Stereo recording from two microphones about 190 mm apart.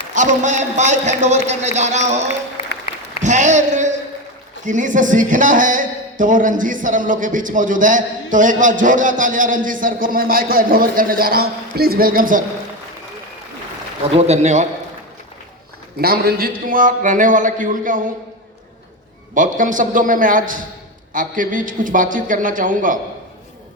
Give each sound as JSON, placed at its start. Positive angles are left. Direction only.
{"t": 0.1, "sound": "a man's voice", "side_deg": -40}
{"t": 2.9, "sound": "applause", "side_deg": 30}
{"t": 3.2, "sound": "a man's voice", "side_deg": -40}
{"t": 14.1, "sound": "a man's voice", "side_deg": -35}
{"t": 16.0, "sound": "a man's voice", "side_deg": -50}
{"t": 19.3, "sound": "a man's voice", "side_deg": -45}